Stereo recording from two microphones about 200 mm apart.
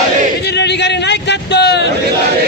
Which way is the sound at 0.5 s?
60° left (ahead or behind).